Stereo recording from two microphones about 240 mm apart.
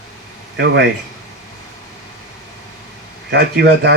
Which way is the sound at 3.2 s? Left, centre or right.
Right.